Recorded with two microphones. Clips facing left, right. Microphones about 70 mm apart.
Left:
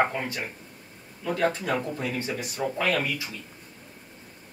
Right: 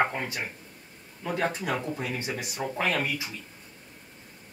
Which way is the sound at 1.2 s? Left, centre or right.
Centre.